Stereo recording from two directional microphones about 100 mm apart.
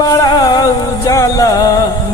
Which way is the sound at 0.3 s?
45° left (ahead or behind).